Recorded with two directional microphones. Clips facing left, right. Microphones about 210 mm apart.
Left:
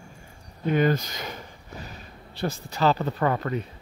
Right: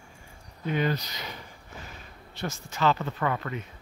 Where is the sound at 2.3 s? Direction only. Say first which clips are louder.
Left 5 dB; 35° left (ahead or behind).